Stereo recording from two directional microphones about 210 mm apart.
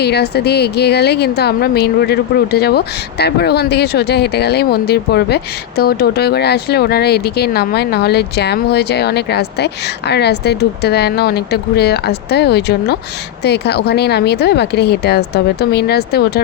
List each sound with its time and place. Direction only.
0.0 s a woman's voice: 50° left (ahead or behind)